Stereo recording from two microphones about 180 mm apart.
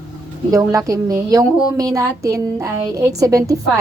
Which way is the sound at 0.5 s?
20° right (ahead or behind).